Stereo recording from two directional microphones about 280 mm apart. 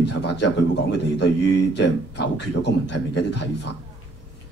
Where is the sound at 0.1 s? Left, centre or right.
Left.